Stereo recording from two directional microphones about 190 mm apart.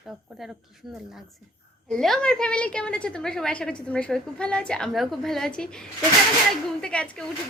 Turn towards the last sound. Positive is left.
turn(degrees=5)  # may be behind; listen again after turning